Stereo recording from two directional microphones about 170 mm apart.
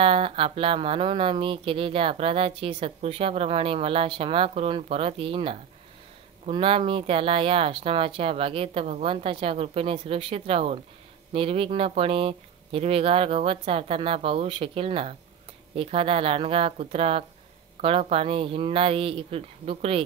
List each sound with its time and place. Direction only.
0.0 s speech: 35° right (ahead or behind)